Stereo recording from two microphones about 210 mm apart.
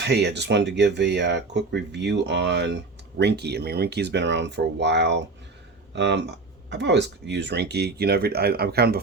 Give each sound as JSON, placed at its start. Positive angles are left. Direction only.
{"t": 0.0, "sound": "speech", "side_deg": -55}